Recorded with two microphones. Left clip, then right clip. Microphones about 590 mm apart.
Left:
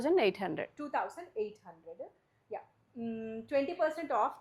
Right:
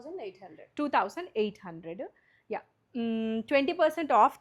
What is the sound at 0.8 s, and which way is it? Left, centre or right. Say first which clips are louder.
Speech: right 11 dB; right.